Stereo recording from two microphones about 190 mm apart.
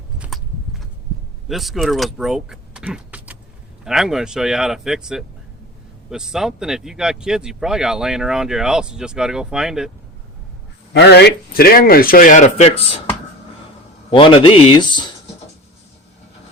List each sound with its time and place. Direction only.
0.2 s a sound: centre (ahead or behind)
1.5 s speech: centre (ahead or behind)
10.9 s speech: 60° left (ahead or behind); by 13.0 s 35° left (ahead or behind)
14.1 s a man's voice: 30° left (ahead or behind)